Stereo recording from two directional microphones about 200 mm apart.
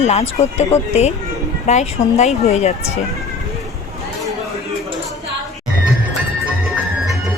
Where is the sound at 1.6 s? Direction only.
35° left (ahead or behind).